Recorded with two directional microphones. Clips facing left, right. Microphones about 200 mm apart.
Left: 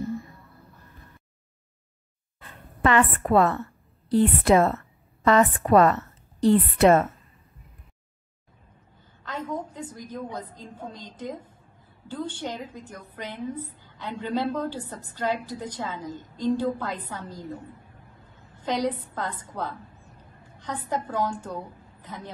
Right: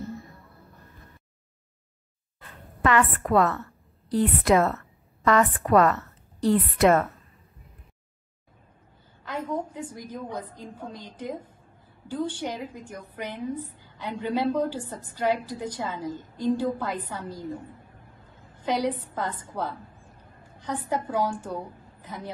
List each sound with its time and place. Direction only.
2.8 s a woman's voice: 25° left (ahead or behind)
9.2 s a woman's voice: 10° right (ahead or behind)
18.7 s a woman's voice: 10° right (ahead or behind)